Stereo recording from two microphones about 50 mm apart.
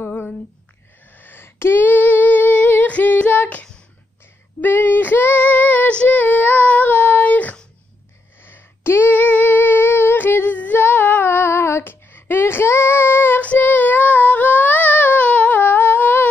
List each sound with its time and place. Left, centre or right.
0.0 s a sound: left
1.1 s a sound: left
1.9 s humming: left
4.7 s female singing: left
8.4 s a sound: left
9.1 s humming: left
11.2 s child singing: left
11.8 s female singing: left
13.4 s female singing: left
15.6 s humming: left